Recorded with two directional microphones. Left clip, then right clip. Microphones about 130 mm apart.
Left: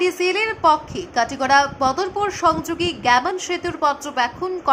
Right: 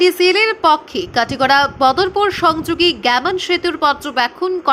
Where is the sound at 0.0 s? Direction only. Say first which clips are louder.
Right 7 dB; 20° right (ahead or behind).